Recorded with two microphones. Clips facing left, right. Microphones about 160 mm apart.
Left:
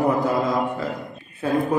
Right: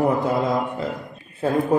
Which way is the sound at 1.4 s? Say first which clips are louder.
Right 1 dB; 30° right (ahead or behind).